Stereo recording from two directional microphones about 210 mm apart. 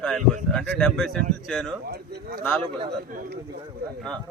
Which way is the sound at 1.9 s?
45° right (ahead or behind).